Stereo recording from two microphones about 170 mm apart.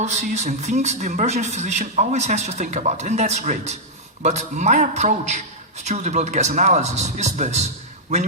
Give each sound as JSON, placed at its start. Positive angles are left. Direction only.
{"t": 0.0, "sound": "a man's voice", "side_deg": -45}